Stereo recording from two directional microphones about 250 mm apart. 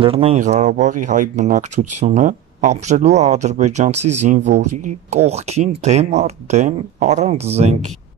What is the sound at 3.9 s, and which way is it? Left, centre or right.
Speech, right.